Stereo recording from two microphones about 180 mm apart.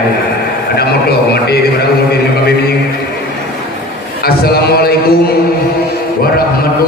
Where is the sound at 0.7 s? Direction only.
60° left (ahead or behind).